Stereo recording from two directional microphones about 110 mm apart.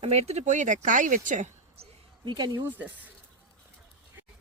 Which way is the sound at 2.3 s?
40° right (ahead or behind).